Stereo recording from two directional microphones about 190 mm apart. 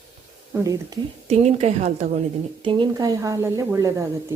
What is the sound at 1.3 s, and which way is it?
A woman's voice, 35° right (ahead or behind).